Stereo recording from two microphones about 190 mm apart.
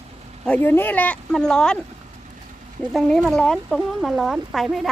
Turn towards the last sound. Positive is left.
turn(degrees=0)  # may be behind; listen again after turning